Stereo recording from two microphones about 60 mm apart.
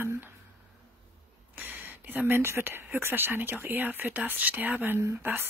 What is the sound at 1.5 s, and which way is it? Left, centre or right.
Speech, right.